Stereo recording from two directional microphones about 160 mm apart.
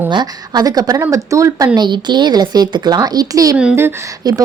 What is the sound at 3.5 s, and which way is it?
Speech, 10° right (ahead or behind).